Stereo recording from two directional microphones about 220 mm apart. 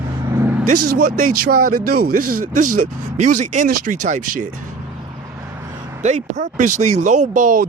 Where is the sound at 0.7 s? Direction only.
90° right.